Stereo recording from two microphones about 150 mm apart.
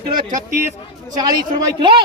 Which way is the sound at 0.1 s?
65° right (ahead or behind).